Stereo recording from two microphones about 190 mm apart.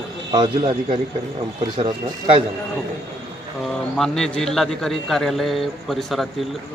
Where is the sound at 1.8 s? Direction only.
30° right (ahead or behind).